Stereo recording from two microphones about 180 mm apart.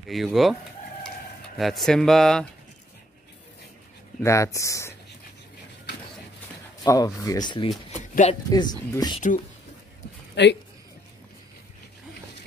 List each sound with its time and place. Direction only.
0.1 s speech: centre (ahead or behind)
1.6 s speech: centre (ahead or behind)
4.2 s speech: 15° left (ahead or behind)
6.8 s speech: 20° left (ahead or behind)
8.1 s speech: 40° left (ahead or behind)
8.5 s speech: 20° left (ahead or behind)
10.3 s speech: 70° left (ahead or behind)